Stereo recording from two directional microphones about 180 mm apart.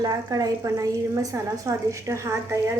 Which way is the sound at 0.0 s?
20° right (ahead or behind).